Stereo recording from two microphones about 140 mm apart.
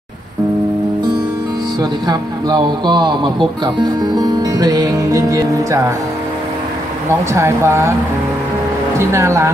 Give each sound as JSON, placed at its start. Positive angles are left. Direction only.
{"t": 1.8, "sound": "speech", "side_deg": -30}
{"t": 7.3, "sound": "speech", "side_deg": -20}
{"t": 8.9, "sound": "speech", "side_deg": -20}